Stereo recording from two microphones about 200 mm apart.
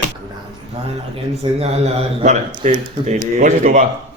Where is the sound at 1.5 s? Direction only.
30° right (ahead or behind).